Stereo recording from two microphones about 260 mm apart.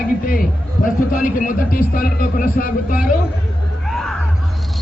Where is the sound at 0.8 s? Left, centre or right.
Left.